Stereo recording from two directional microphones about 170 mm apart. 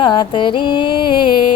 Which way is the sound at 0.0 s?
30° left (ahead or behind).